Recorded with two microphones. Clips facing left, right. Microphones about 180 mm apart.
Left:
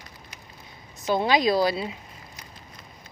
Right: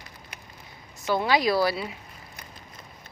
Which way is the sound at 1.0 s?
20° left (ahead or behind).